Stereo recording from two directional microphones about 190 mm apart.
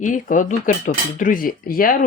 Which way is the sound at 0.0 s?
45° left (ahead or behind).